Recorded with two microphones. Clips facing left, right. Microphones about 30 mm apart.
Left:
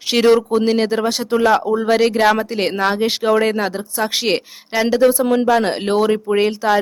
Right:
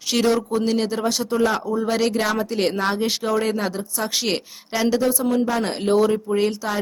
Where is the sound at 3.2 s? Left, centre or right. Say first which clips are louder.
Left 8 dB; left.